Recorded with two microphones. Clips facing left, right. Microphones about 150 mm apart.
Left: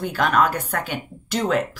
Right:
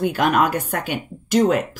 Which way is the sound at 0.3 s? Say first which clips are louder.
Right 1 dB; 45° right (ahead or behind).